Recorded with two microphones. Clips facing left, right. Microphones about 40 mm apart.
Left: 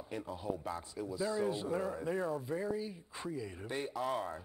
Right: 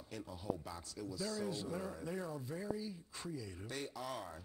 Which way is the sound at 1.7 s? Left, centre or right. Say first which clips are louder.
Left 7 dB; left.